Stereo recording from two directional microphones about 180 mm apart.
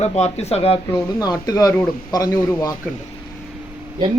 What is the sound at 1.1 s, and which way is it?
A man's voice, 20° left (ahead or behind).